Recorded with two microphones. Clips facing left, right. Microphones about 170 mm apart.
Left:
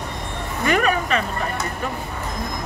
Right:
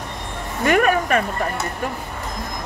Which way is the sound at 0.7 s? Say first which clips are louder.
Right 3 dB; 50° right (ahead or behind).